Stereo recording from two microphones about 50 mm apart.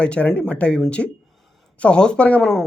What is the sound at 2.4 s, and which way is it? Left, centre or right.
Speech, centre.